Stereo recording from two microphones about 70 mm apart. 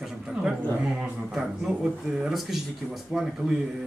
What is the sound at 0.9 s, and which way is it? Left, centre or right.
Speech, centre.